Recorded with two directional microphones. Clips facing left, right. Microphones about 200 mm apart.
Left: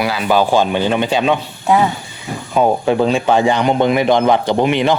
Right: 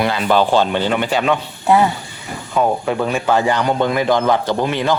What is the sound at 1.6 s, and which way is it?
Speech, centre (ahead or behind).